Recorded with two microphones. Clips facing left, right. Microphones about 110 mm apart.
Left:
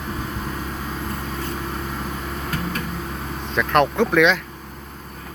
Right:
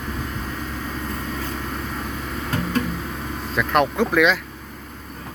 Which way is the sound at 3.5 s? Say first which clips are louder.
Left 2 dB; centre (ahead or behind).